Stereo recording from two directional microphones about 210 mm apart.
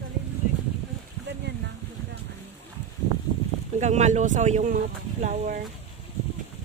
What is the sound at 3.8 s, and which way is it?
Speech, 35° right (ahead or behind).